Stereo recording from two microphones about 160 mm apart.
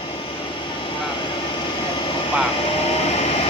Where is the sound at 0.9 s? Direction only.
30° left (ahead or behind).